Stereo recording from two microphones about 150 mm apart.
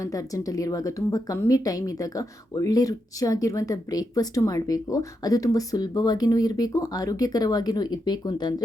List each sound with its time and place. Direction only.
0.0 s a woman's voice: 20° left (ahead or behind)